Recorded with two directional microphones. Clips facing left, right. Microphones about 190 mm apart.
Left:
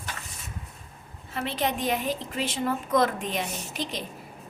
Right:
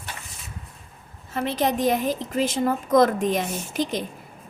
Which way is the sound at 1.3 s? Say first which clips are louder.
Right 5 dB; 45° right (ahead or behind).